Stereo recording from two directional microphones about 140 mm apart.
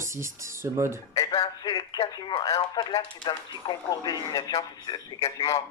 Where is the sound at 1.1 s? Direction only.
25° left (ahead or behind).